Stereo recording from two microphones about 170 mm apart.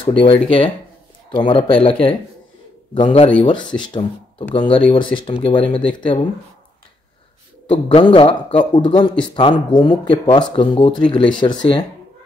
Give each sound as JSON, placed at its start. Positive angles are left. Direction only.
{"t": 0.0, "sound": "a man's voice", "side_deg": 30}
{"t": 7.6, "sound": "a man's voice", "side_deg": 30}